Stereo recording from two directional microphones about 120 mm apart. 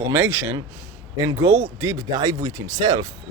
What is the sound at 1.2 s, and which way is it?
Speech, 30° right (ahead or behind).